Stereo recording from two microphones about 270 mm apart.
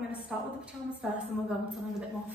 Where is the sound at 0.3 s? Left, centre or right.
Centre.